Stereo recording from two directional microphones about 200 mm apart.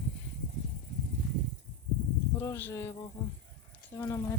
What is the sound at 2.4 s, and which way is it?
Speech, 10° left (ahead or behind).